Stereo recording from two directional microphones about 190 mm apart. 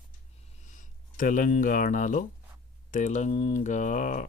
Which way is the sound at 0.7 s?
40° left (ahead or behind).